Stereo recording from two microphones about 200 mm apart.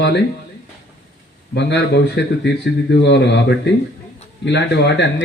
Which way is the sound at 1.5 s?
60° left (ahead or behind).